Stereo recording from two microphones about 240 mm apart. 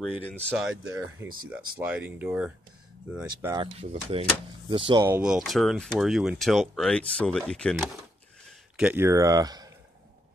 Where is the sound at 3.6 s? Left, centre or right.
Right; by 7.8 s centre.